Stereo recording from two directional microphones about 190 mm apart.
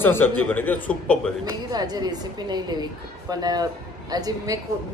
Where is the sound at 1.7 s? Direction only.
20° right (ahead or behind).